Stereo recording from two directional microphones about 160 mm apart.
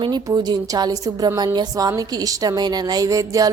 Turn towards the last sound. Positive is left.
turn(degrees=-20)  # may be behind; listen again after turning